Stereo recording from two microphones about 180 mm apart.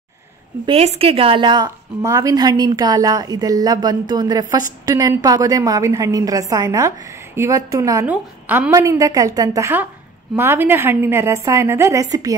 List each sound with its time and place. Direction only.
0.7 s a woman's voice: 35° right (ahead or behind)